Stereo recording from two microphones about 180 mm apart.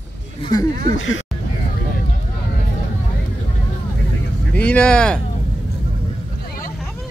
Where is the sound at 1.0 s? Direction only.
90° left.